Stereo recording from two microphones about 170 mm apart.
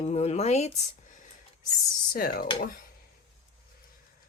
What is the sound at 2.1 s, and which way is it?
Speech, 65° left (ahead or behind).